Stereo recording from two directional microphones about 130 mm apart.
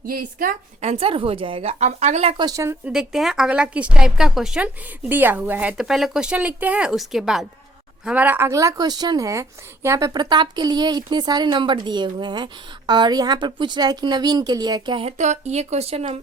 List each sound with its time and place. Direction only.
0.0 s speech: 90° right
0.9 s speech: 45° right (ahead or behind)
1.8 s speech: 60° right (ahead or behind)
2.4 s a woman's voice: 25° right (ahead or behind)
2.8 s a woman's voice: 5° right (ahead or behind)
5.8 s a woman's voice: centre (ahead or behind); by 15.1 s 40° right (ahead or behind)
15.2 s speech: 60° right (ahead or behind)